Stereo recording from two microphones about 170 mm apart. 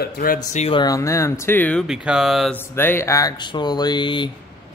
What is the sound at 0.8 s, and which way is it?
Speech, 20° left (ahead or behind).